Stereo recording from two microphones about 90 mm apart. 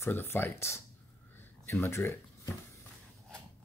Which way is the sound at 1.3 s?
25° left (ahead or behind).